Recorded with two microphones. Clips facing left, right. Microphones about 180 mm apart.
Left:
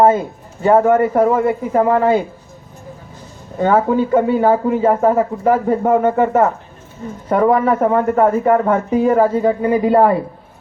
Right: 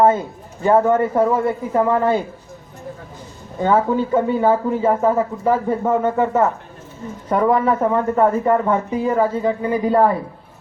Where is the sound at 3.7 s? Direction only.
15° left (ahead or behind).